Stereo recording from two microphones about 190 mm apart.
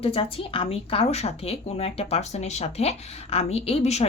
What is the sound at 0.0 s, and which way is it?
Speech, 30° left (ahead or behind).